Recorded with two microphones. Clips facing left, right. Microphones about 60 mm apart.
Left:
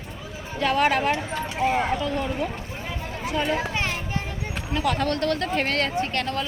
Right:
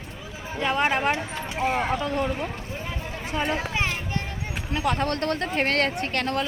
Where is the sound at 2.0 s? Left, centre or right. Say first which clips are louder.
Right 1 dB; right.